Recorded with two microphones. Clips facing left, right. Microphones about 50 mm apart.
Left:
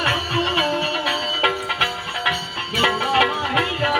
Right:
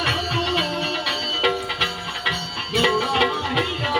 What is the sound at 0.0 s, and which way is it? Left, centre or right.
Music, left.